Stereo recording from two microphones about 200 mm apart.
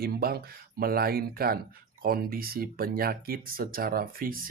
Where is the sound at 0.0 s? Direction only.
50° right (ahead or behind).